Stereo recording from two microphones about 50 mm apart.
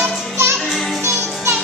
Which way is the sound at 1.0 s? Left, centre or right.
Right.